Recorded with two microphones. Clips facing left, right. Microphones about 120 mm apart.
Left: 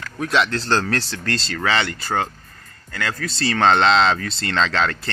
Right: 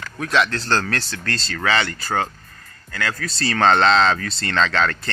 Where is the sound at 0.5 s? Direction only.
25° left (ahead or behind).